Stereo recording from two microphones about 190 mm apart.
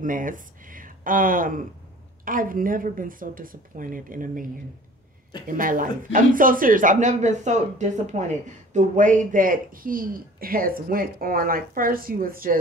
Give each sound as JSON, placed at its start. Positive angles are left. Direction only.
{"t": 0.0, "sound": "speech", "side_deg": -45}
{"t": 5.5, "sound": "speech", "side_deg": -45}